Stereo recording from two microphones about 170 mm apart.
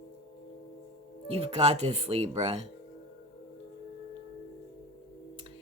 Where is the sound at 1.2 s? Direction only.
35° right (ahead or behind).